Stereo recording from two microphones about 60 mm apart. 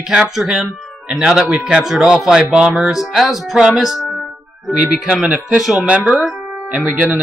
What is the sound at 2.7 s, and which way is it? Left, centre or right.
Music, centre.